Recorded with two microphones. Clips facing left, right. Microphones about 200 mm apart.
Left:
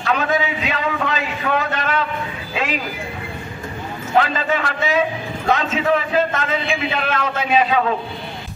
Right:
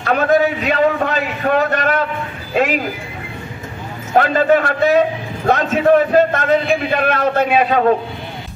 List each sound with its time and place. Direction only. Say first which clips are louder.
0.0 s a man's voice: right 6 dB; 50° right (ahead or behind)
4.1 s a man's voice: right 6 dB; 45° right (ahead or behind)